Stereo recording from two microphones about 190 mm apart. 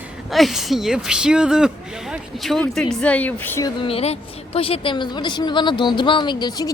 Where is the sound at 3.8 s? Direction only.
30° left (ahead or behind).